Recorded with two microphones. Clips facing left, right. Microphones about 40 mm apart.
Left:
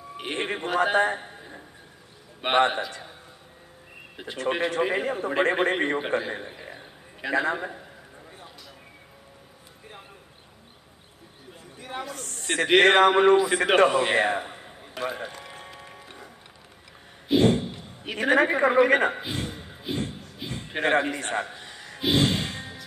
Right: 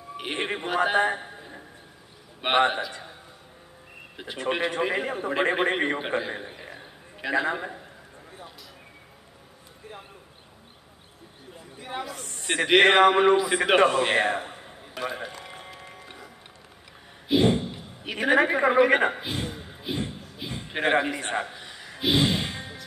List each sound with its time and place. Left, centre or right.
0.2 s a man's voice: centre
1.2 s a sound: centre
2.4 s a man's voice: centre
4.4 s a man's voice: centre
12.4 s a sound: centre
12.8 s a man's voice: centre
13.8 s a man's voice: centre
14.2 s music: centre
17.6 s a sound: centre
18.5 s a man's voice: centre
19.4 s a sound: centre
21.2 s music: centre